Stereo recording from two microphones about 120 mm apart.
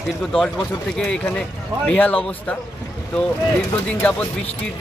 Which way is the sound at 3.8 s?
10° left (ahead or behind).